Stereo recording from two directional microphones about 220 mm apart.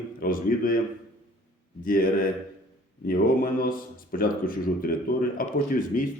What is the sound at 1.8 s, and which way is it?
Speech, 40° left (ahead or behind).